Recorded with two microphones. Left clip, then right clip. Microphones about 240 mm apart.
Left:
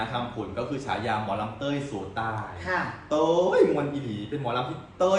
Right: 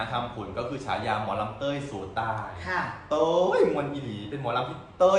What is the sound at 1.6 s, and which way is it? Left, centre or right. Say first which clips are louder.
Speech: even; centre.